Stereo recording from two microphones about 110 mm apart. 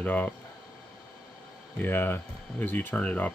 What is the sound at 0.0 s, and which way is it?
Speech, 15° left (ahead or behind).